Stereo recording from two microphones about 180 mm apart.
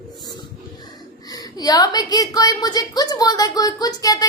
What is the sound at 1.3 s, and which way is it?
A woman's voice, 20° left (ahead or behind).